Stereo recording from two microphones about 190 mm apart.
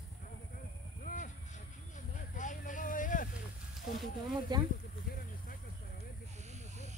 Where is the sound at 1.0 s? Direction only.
45° left (ahead or behind).